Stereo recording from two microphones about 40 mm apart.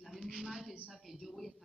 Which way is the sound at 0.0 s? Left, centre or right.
Centre.